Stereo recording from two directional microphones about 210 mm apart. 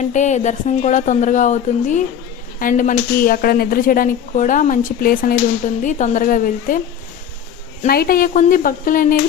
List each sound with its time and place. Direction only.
0.0 s speech: 35° left (ahead or behind)
7.9 s speech: 45° left (ahead or behind)